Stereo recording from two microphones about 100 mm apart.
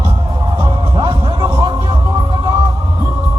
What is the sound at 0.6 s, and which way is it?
Music, 40° right (ahead or behind).